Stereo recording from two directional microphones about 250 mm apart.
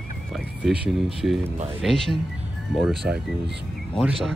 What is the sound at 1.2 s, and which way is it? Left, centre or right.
Speech, centre.